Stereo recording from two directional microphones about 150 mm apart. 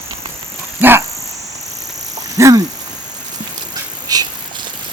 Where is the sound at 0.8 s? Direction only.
15° right (ahead or behind).